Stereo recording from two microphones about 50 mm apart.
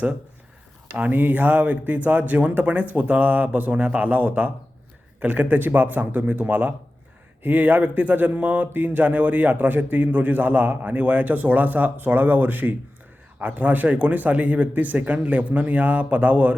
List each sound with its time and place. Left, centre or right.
1.1 s speech: right